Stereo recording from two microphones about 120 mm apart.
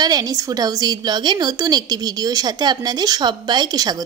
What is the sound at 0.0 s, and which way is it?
A woman's voice, 35° right (ahead or behind).